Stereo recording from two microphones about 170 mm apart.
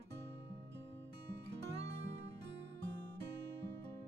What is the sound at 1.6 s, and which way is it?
Music, 90° right.